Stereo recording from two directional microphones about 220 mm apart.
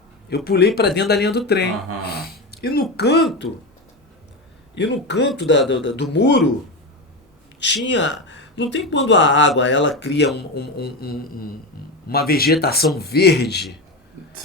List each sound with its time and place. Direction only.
0.3 s speech: 45° left (ahead or behind)
5.0 s speech: 50° left (ahead or behind)
7.9 s speech: 55° left (ahead or behind)